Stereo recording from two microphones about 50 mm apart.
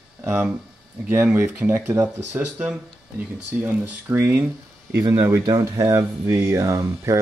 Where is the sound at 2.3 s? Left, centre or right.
Right.